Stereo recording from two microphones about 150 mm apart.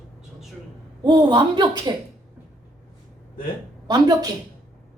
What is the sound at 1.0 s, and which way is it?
Speech, 30° right (ahead or behind).